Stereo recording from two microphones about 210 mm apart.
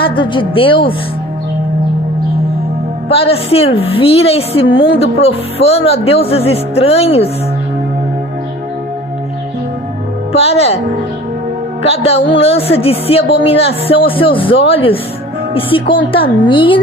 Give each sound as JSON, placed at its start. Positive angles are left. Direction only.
{"t": 0.0, "sound": "speech", "side_deg": 25}
{"t": 3.1, "sound": "speech", "side_deg": 25}
{"t": 10.3, "sound": "speech", "side_deg": 30}
{"t": 11.8, "sound": "speech", "side_deg": 30}